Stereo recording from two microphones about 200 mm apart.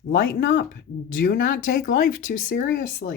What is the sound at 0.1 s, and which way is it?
Speech, 50° left (ahead or behind).